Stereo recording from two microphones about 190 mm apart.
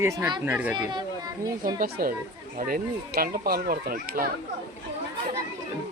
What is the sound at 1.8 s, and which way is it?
Speech, 50° right (ahead or behind).